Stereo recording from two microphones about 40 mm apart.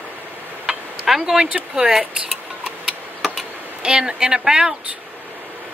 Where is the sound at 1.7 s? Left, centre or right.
Centre.